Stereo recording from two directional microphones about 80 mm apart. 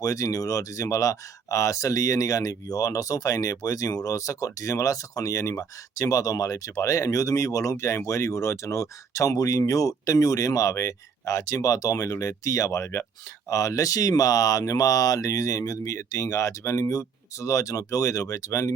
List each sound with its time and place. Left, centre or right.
0.0 s speech: left